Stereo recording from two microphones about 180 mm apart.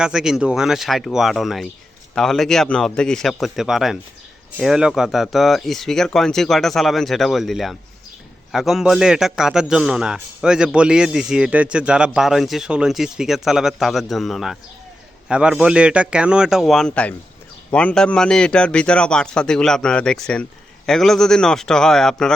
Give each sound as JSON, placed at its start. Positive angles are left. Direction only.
{"t": 0.0, "sound": "a man's voice", "side_deg": -5}